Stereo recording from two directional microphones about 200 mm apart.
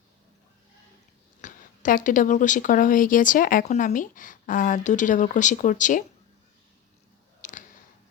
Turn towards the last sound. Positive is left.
turn(degrees=40)  # may be behind; listen again after turning